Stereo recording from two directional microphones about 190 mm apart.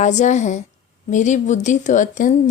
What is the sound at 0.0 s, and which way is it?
Speech, 40° left (ahead or behind).